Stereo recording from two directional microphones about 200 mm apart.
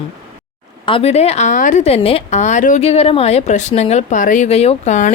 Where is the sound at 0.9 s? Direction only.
30° left (ahead or behind).